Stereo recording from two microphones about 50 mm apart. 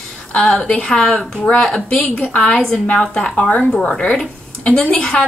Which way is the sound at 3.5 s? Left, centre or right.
Left.